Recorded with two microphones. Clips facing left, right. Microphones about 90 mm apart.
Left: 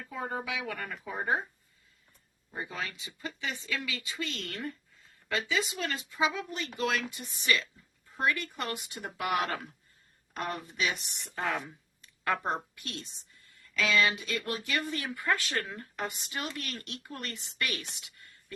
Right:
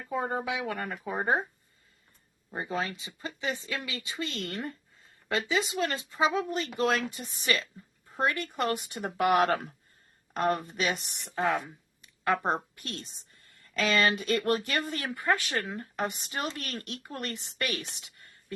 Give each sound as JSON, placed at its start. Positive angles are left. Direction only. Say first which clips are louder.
{"t": 0.1, "sound": "speech", "louder": "right 5 dB", "side_deg": -30}
{"t": 2.5, "sound": "speech", "louder": "right 5 dB", "side_deg": -30}
{"t": 11.3, "sound": "speech", "louder": "right 5 dB", "side_deg": -20}
{"t": 12.0, "sound": "a sound", "louder": "right 3 dB", "side_deg": -20}
{"t": 12.5, "sound": "a woman's voice", "louder": "right 3 dB", "side_deg": -40}
{"t": 14.8, "sound": "speech", "louder": "right 2 dB", "side_deg": -35}